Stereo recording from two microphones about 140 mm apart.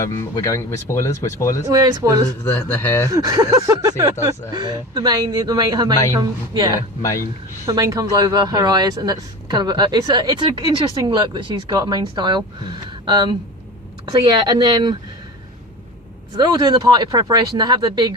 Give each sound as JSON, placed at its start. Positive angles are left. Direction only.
{"t": 0.0, "sound": "speech", "side_deg": 25}
{"t": 1.7, "sound": "speech", "side_deg": -25}
{"t": 2.4, "sound": "speech", "side_deg": 15}
{"t": 3.1, "sound": "speech", "side_deg": -25}
{"t": 16.3, "sound": "speech", "side_deg": -30}